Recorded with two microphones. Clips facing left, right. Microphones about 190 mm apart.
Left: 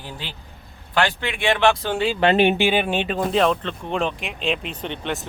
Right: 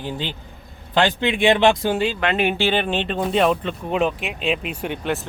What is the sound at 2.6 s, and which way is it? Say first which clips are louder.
Speech: left 1 dB; 10° left (ahead or behind).